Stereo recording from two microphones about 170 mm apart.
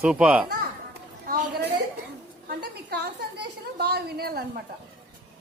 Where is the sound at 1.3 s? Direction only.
65° right (ahead or behind).